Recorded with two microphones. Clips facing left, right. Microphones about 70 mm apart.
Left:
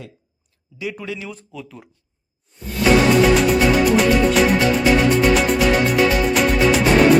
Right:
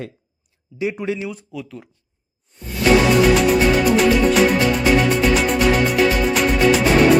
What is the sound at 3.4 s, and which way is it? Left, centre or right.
Music, centre.